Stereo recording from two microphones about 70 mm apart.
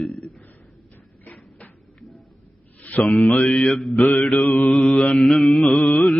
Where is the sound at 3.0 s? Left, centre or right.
Centre.